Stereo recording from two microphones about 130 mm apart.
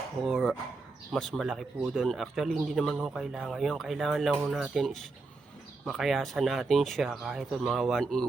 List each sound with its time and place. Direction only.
0.3 s a man's voice: centre (ahead or behind)